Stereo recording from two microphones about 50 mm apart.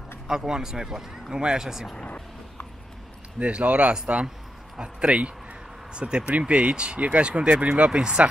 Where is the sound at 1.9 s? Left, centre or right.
Left.